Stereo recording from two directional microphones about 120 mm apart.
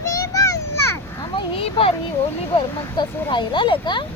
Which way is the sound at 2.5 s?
40° left (ahead or behind).